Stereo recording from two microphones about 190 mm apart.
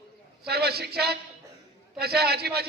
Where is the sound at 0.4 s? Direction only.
55° right (ahead or behind).